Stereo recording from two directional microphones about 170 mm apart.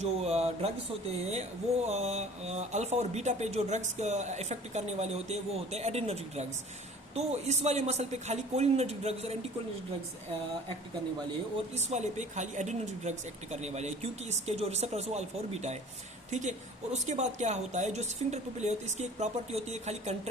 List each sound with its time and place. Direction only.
0.0 s speech: 40° right (ahead or behind)
11.7 s speech: 40° right (ahead or behind)
16.3 s a woman's voice: 45° right (ahead or behind)